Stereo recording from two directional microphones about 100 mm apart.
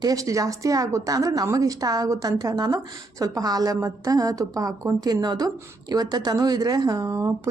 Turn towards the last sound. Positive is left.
turn(degrees=-35)  # may be behind; listen again after turning